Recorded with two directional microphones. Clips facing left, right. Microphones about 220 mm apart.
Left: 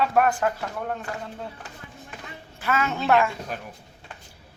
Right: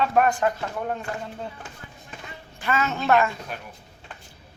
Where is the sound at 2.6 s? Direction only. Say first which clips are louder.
Even; 10° left (ahead or behind).